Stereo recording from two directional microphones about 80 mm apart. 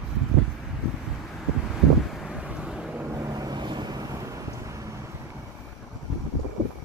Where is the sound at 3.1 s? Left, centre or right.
Right.